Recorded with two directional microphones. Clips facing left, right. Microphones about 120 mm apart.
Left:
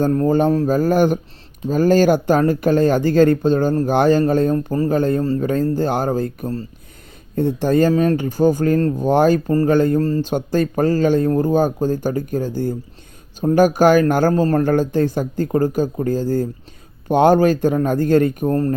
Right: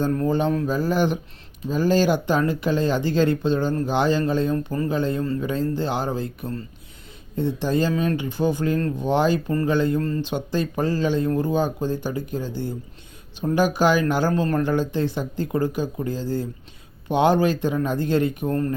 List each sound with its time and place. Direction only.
0.0 s speech: 40° left (ahead or behind)
4.5 s speech: 35° left (ahead or behind)
10.0 s speech: 40° left (ahead or behind)